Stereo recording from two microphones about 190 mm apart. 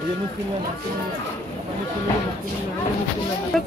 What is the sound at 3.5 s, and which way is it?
Speech, 5° left (ahead or behind).